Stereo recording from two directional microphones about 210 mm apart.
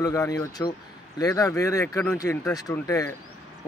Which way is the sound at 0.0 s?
15° left (ahead or behind).